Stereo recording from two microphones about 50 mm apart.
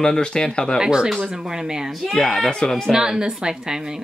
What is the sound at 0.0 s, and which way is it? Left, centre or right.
Speech, centre.